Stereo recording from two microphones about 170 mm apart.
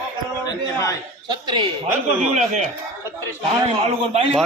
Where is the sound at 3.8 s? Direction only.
35° right (ahead or behind).